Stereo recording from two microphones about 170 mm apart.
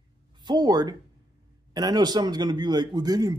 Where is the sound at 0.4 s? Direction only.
25° right (ahead or behind).